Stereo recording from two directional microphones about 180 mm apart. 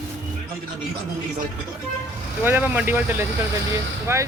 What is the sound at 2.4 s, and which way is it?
Speech, 10° right (ahead or behind).